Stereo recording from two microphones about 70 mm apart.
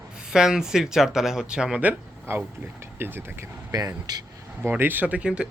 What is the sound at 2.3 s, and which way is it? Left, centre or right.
Speech, right.